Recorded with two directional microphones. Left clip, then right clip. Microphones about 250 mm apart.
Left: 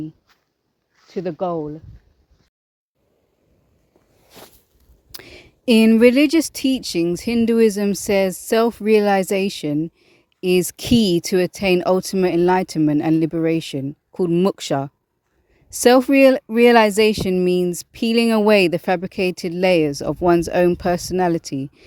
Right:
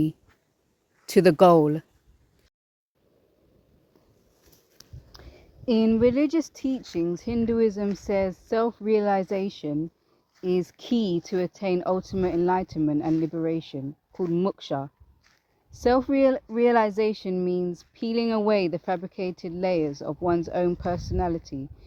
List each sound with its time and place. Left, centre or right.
1.0 s speech: right
5.1 s speech: left